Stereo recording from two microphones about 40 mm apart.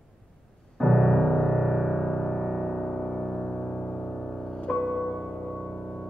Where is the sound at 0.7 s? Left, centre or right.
Centre.